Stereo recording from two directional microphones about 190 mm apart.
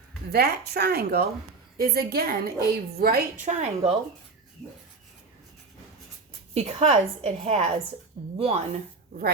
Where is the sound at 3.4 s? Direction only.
35° right (ahead or behind).